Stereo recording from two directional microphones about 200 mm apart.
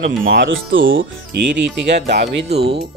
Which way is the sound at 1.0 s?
60° right (ahead or behind).